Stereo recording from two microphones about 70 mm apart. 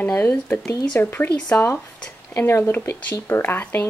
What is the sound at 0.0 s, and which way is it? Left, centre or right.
Speech, left.